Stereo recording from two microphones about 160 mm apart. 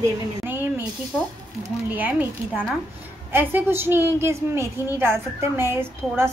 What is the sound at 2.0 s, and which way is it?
A woman's voice, 10° right (ahead or behind).